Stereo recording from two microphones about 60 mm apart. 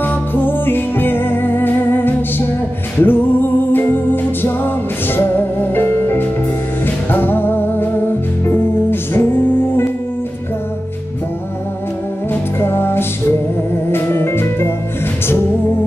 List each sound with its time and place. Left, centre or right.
0.0 s music: left
12.5 s music: left